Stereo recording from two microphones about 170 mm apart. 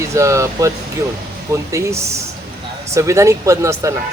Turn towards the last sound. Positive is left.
turn(degrees=-15)  # may be behind; listen again after turning